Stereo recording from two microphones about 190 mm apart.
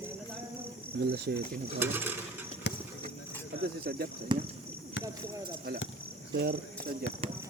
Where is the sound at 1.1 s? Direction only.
60° right (ahead or behind).